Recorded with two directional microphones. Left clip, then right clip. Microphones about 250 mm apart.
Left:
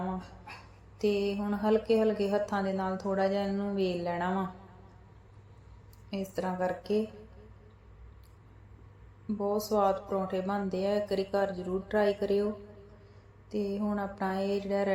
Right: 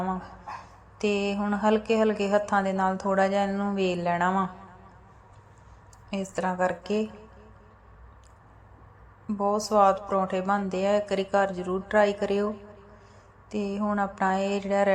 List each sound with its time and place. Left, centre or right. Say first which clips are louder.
0.9 s speech: right 3 dB; centre
6.1 s speech: right 5 dB; centre
9.2 s speech: right 5 dB; centre